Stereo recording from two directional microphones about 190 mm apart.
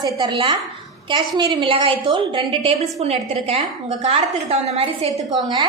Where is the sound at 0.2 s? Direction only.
25° right (ahead or behind).